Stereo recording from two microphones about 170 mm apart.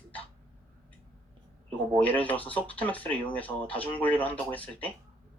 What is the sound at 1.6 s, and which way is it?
Speech, 10° left (ahead or behind).